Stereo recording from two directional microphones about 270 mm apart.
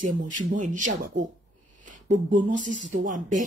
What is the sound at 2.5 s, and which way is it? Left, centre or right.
Speech, right.